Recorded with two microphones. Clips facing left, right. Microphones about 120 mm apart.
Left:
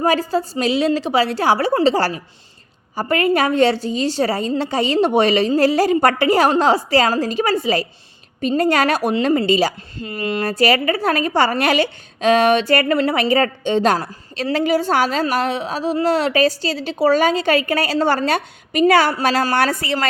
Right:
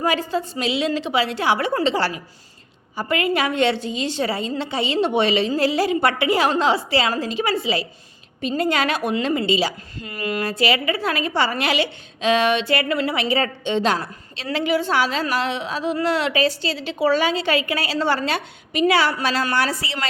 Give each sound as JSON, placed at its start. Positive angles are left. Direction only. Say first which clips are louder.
{"t": 0.0, "sound": "a woman's voice", "louder": "left 4 dB", "side_deg": 40}
{"t": 10.0, "sound": "a woman's voice", "louder": "left 3 dB", "side_deg": 30}
{"t": 10.6, "sound": "a woman's voice", "louder": "left 5 dB", "side_deg": 45}